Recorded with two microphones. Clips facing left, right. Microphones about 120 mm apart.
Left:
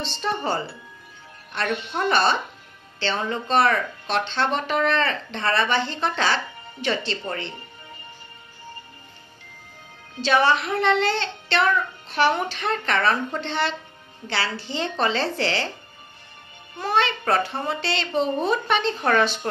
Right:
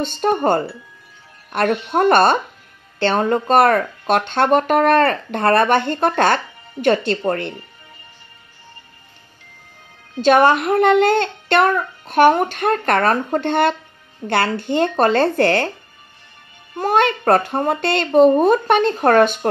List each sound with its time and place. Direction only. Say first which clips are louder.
0.0 s speech: right 9 dB; 50° right (ahead or behind)
10.2 s speech: right 7 dB; 50° right (ahead or behind)
16.7 s speech: right 6 dB; 45° right (ahead or behind)